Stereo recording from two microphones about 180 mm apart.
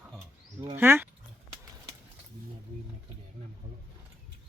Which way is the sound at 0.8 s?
10° right (ahead or behind).